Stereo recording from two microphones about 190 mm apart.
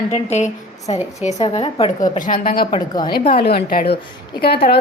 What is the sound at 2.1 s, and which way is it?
Speech, 45° left (ahead or behind).